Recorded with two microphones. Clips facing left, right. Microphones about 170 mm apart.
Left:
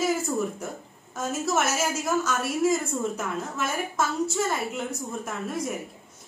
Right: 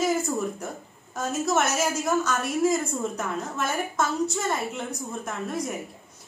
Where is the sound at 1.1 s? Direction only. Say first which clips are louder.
Right 1 dB; 5° left (ahead or behind).